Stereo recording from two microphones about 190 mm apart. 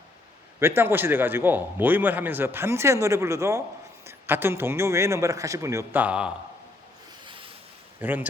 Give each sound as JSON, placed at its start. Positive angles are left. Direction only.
{"t": 0.8, "sound": "a man's voice", "side_deg": -10}
{"t": 7.3, "sound": "boat", "side_deg": -25}
{"t": 8.0, "sound": "a man's voice", "side_deg": -10}